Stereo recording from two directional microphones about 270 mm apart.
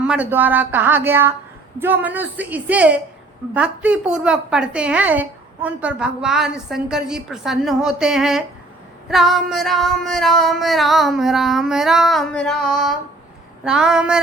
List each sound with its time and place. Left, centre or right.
0.0 s a woman's voice: centre